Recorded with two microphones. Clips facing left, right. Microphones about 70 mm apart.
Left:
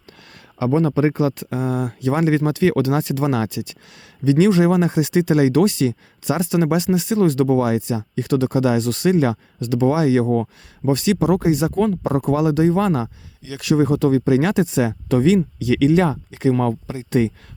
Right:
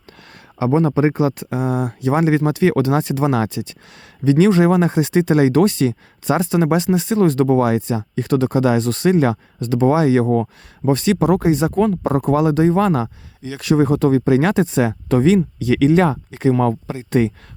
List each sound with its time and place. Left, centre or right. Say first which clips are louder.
0.6 s speech: right 2 dB; right